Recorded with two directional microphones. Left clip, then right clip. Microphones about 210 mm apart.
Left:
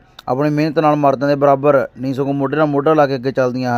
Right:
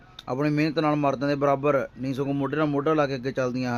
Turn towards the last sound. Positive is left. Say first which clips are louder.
# left 10 dB
turn(degrees=25)  # may be behind; listen again after turning